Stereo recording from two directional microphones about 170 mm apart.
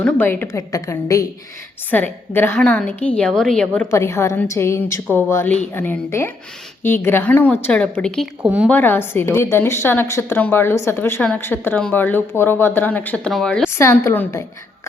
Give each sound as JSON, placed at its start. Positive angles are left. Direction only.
{"t": 0.0, "sound": "a woman's voice", "side_deg": 10}
{"t": 3.9, "sound": "a woman's voice", "side_deg": 15}
{"t": 8.4, "sound": "speech", "side_deg": -5}
{"t": 8.7, "sound": "a woman's voice", "side_deg": 10}
{"t": 13.7, "sound": "a woman's voice", "side_deg": 15}